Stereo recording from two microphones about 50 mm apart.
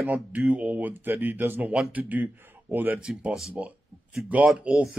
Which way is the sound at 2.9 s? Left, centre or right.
Centre.